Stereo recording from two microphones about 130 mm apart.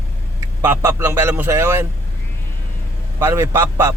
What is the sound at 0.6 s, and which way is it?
A man's voice, 20° right (ahead or behind).